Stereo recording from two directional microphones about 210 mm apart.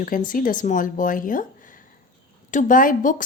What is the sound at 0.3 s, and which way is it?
A woman's voice, 40° left (ahead or behind).